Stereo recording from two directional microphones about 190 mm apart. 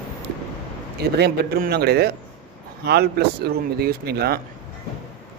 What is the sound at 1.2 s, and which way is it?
Speech, 55° right (ahead or behind).